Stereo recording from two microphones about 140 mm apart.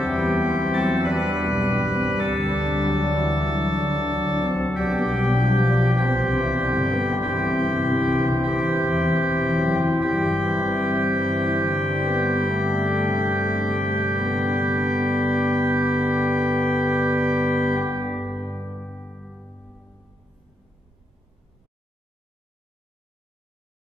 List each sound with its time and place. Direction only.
0.0 s organ: centre (ahead or behind)
17.8 s music: 15° right (ahead or behind)
18.1 s music: 5° left (ahead or behind)